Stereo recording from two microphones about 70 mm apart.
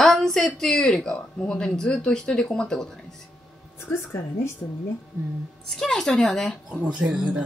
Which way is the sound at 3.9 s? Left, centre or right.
Left.